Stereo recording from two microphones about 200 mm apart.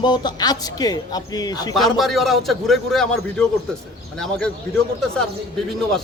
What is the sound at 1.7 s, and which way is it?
A man's voice, centre (ahead or behind).